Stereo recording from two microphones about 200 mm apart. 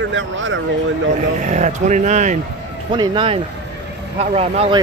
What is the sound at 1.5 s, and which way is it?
Speech, 35° right (ahead or behind).